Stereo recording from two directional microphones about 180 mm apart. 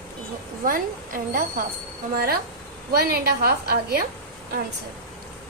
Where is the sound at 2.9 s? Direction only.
60° right (ahead or behind).